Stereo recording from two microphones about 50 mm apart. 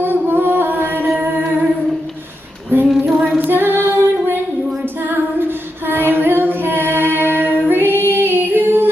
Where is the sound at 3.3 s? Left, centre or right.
Right.